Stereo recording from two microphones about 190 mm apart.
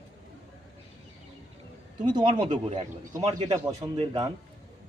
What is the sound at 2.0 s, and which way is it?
Speech, 25° right (ahead or behind).